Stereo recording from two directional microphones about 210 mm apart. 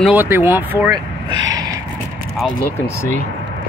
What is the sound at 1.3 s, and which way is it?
Snort, 65° right (ahead or behind).